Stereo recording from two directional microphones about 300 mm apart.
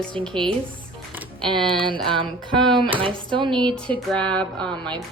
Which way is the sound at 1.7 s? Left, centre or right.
Centre.